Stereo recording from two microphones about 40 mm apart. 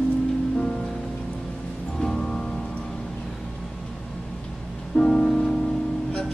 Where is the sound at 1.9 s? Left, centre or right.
Centre.